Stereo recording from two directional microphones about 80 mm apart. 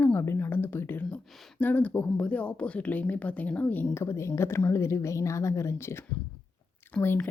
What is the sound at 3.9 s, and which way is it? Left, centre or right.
Speech, left.